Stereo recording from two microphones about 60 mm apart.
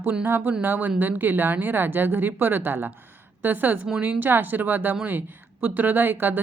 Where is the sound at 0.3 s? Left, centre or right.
Right.